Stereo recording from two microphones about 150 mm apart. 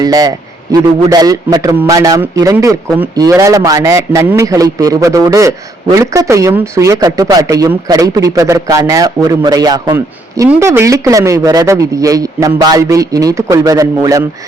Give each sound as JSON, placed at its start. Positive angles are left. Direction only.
{"t": 0.0, "sound": "a man's voice", "side_deg": -25}